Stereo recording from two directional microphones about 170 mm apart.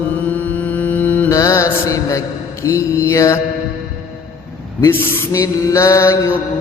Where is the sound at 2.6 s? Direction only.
15° left (ahead or behind).